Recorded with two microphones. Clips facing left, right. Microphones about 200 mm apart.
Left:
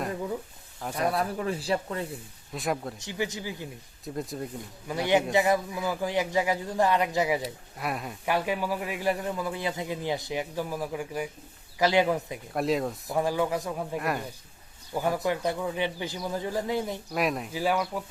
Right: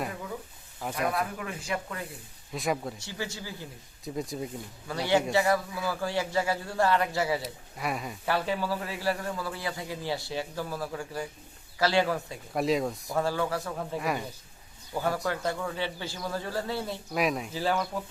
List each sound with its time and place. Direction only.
0.9 s speech: 35° left (ahead or behind)
2.5 s speech: centre (ahead or behind)
3.0 s speech: 20° left (ahead or behind)
4.0 s speech: centre (ahead or behind)
4.9 s speech: 15° left (ahead or behind)
7.4 s speech: centre (ahead or behind)
8.2 s speech: 15° left (ahead or behind)
12.5 s speech: centre (ahead or behind)
13.1 s speech: 15° left (ahead or behind)
14.0 s speech: centre (ahead or behind)
14.9 s speech: 15° left (ahead or behind)
17.2 s speech: centre (ahead or behind)
17.5 s speech: 10° left (ahead or behind)